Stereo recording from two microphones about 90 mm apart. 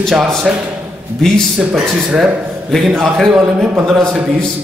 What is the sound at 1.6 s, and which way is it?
Speech, 10° right (ahead or behind).